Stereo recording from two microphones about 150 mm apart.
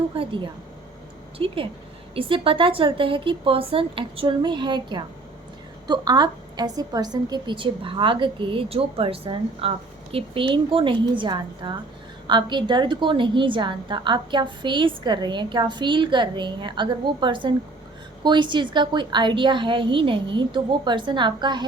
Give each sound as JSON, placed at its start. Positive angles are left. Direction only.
{"t": 0.2, "sound": "a woman's voice", "side_deg": -35}